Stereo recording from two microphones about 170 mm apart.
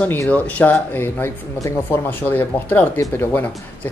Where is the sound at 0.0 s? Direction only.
10° left (ahead or behind).